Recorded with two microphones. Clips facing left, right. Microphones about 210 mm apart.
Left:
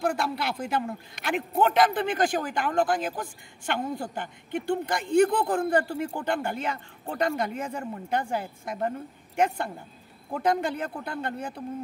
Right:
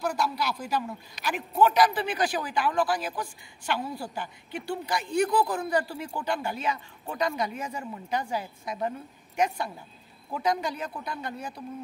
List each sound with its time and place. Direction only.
0.0 s speech: 55° left (ahead or behind)
10.3 s speech: 55° left (ahead or behind)